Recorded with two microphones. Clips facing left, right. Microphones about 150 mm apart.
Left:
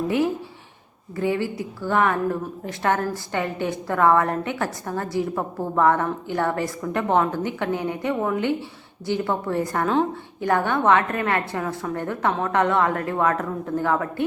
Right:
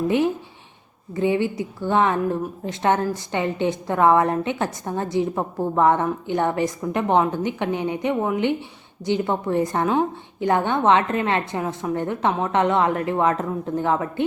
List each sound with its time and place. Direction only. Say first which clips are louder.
1.1 s a woman's voice: right 3 dB; 20° right (ahead or behind)